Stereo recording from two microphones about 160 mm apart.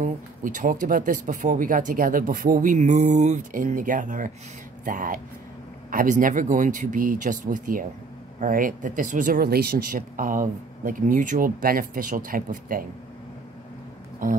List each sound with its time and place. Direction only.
0.0 s speech: 55° right (ahead or behind)
14.2 s speech: 55° right (ahead or behind)